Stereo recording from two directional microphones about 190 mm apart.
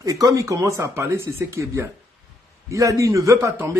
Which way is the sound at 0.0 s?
15° right (ahead or behind).